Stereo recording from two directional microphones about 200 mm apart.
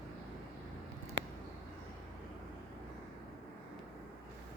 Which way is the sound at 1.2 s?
60° right (ahead or behind).